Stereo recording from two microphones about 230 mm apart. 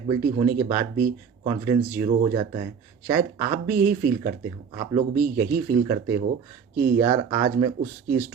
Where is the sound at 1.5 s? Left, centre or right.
Centre.